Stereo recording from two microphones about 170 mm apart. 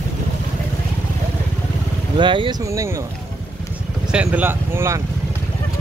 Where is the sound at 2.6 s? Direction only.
15° right (ahead or behind).